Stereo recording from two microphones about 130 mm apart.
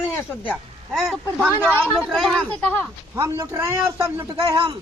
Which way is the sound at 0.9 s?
Centre (ahead or behind).